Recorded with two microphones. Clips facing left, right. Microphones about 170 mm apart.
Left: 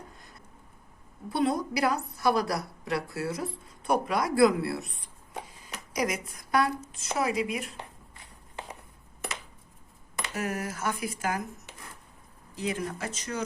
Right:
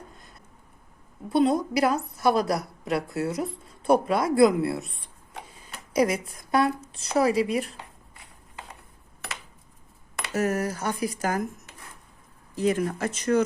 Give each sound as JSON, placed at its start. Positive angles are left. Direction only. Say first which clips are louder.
{"t": 1.3, "sound": "a woman's voice", "louder": "right 5 dB", "side_deg": -25}
{"t": 5.9, "sound": "speech", "louder": "right 7 dB", "side_deg": -30}
{"t": 10.3, "sound": "speech", "louder": "right 8 dB", "side_deg": -40}
{"t": 12.5, "sound": "speech", "louder": "right 8 dB", "side_deg": -50}